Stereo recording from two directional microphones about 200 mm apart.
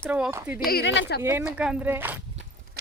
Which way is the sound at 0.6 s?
50° left (ahead or behind).